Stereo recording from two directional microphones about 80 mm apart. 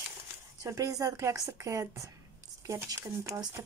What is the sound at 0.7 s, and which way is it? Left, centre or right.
A woman's voice, right.